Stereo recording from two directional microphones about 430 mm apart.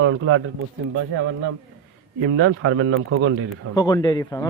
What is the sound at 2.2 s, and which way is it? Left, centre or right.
A man's voice, right.